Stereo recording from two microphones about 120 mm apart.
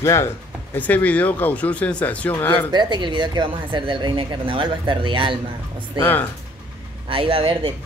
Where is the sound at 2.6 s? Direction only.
40° right (ahead or behind).